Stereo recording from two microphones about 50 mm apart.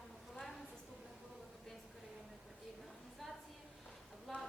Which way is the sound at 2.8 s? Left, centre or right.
Centre.